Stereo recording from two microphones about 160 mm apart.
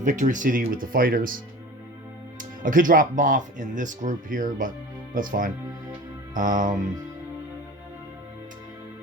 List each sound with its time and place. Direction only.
0.0 s speech: 50° right (ahead or behind)
2.4 s speech: 55° right (ahead or behind)